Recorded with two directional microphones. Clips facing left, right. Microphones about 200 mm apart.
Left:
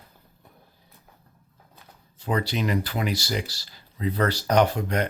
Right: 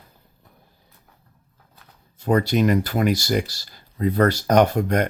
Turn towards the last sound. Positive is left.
turn(degrees=-50)  # may be behind; listen again after turning